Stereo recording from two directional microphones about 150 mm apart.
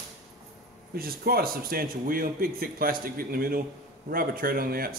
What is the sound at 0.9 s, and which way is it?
A man's voice, 90° right.